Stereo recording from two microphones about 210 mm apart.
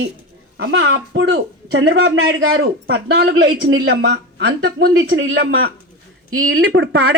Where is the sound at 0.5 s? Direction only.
60° right (ahead or behind).